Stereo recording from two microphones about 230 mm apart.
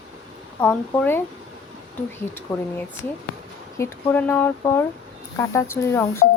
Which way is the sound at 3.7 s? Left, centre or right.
Centre.